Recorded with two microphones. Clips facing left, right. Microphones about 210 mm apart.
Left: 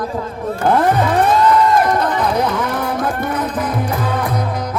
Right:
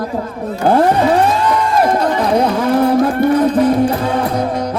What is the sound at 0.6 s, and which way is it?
Speech, 30° right (ahead or behind).